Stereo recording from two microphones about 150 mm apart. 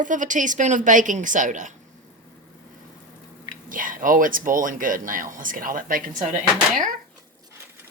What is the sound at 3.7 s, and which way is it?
Speech, 65° right (ahead or behind).